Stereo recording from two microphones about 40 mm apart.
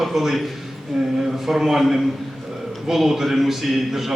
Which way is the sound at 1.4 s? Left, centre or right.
Centre.